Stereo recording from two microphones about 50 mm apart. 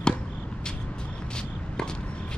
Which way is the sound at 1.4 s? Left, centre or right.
Centre.